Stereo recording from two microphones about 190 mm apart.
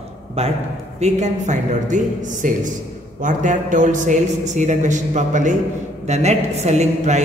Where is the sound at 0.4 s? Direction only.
35° right (ahead or behind).